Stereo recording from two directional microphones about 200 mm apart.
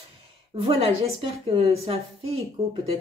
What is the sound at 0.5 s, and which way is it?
Speech, 30° right (ahead or behind).